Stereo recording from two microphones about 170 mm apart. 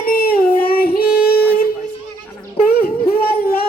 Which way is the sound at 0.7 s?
60° left (ahead or behind).